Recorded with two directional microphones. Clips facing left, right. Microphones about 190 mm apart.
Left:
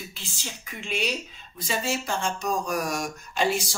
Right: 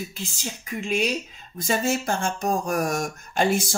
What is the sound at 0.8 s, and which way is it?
Speech, 40° right (ahead or behind).